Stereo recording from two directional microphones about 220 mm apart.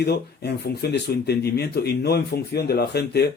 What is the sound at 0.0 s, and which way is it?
Speech, 45° left (ahead or behind).